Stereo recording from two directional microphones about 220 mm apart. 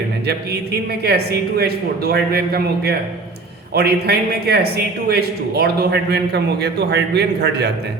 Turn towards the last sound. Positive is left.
turn(degrees=-50)  # may be behind; listen again after turning